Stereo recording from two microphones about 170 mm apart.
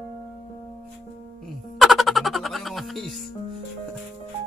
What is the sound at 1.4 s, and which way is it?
Music, centre (ahead or behind).